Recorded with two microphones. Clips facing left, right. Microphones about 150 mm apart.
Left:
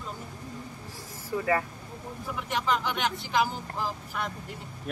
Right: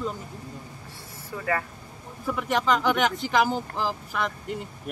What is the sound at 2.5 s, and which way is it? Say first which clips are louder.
Speech: right 5 dB; 90° right.